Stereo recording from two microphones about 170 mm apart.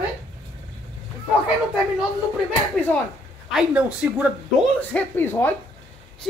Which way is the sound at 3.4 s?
5° right (ahead or behind).